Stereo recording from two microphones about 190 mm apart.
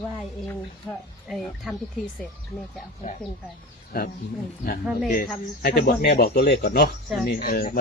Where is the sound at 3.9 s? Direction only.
55° left (ahead or behind).